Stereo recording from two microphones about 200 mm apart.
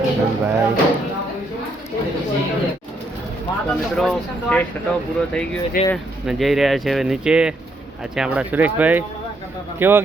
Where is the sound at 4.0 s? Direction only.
5° left (ahead or behind).